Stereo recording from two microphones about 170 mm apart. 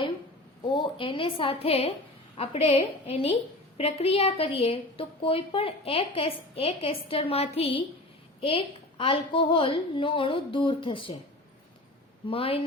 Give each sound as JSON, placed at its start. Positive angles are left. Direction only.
{"t": 0.7, "sound": "a woman's voice", "side_deg": 30}
{"t": 12.2, "sound": "a woman's voice", "side_deg": 35}